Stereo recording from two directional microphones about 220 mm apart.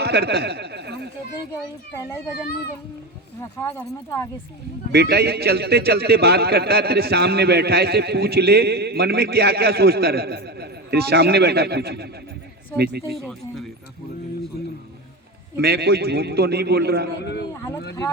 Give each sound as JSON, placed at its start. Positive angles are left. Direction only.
{"t": 0.0, "sound": "a sound", "side_deg": -50}
{"t": 3.6, "sound": "speech", "side_deg": 10}
{"t": 4.9, "sound": "a man's voice", "side_deg": -45}
{"t": 13.1, "sound": "speech", "side_deg": 0}
{"t": 15.5, "sound": "a man's voice", "side_deg": -45}
{"t": 17.5, "sound": "a sound", "side_deg": 15}